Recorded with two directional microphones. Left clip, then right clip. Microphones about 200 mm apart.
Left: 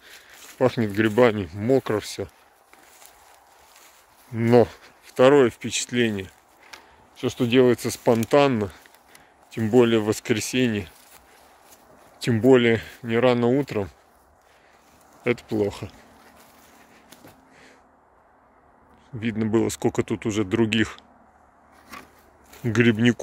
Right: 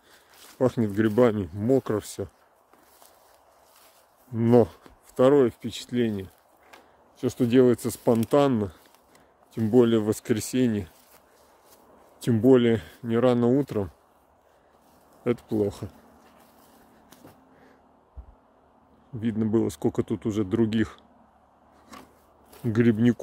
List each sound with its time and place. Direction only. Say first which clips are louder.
0.6 s speech: left 3 dB; 10° right (ahead or behind)
4.4 s speech: left 3 dB; 15° right (ahead or behind)
7.2 s speech: left 2 dB; 20° right (ahead or behind)
12.2 s speech: left 2 dB; 10° right (ahead or behind)
15.2 s speech: left 2 dB; 15° right (ahead or behind)
19.1 s speech: left 2 dB; 15° right (ahead or behind)
22.7 s speech: left 3 dB; 5° right (ahead or behind)